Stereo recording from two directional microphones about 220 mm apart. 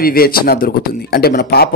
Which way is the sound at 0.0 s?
40° left (ahead or behind).